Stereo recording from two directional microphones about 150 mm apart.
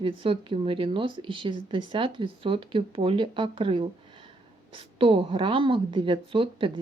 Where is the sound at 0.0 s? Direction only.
35° right (ahead or behind).